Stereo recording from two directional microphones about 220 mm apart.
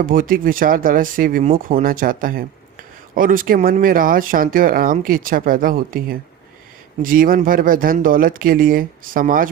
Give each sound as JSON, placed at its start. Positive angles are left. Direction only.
{"t": 0.0, "sound": "speech", "side_deg": -40}